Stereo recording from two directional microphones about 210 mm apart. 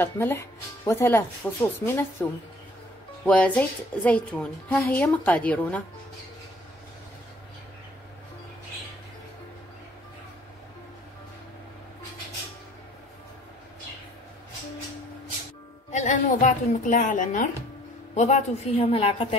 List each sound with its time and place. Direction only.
0.0 s a woman's voice: 10° left (ahead or behind)
3.3 s a woman's voice: 5° left (ahead or behind)
15.9 s a woman's voice: 35° left (ahead or behind)